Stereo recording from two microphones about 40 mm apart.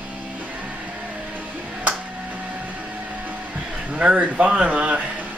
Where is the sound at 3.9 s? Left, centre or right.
Right.